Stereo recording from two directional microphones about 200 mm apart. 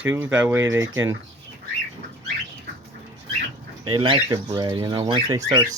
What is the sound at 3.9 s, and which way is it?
Speech, 25° right (ahead or behind).